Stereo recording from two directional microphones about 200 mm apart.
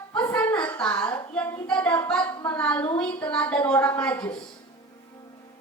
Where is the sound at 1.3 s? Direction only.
5° left (ahead or behind).